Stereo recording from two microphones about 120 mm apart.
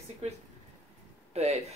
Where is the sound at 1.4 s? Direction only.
60° right (ahead or behind).